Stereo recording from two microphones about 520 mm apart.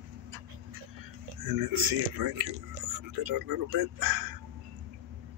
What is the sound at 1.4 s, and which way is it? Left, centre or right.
Speech, right.